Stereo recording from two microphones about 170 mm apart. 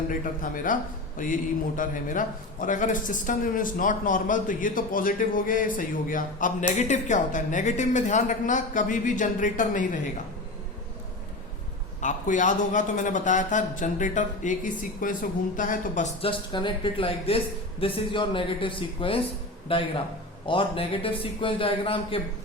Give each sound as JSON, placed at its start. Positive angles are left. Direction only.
{"t": 0.1, "sound": "a man's voice", "side_deg": 55}
{"t": 11.9, "sound": "a man's voice", "side_deg": 50}
{"t": 16.2, "sound": "a woman's voice", "side_deg": 30}